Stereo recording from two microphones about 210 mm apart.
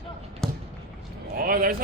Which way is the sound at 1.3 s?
45° right (ahead or behind).